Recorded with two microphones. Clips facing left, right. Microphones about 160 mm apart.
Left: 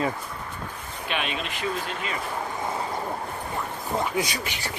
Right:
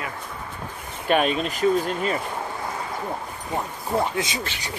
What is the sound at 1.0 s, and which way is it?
Speech, 45° right (ahead or behind).